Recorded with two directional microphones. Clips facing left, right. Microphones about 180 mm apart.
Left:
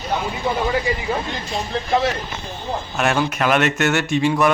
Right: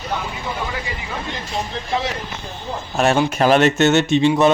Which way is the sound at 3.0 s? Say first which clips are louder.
Right 4 dB; 25° right (ahead or behind).